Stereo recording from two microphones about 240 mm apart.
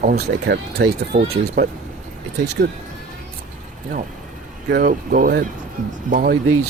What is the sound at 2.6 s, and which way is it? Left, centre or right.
Speech, right.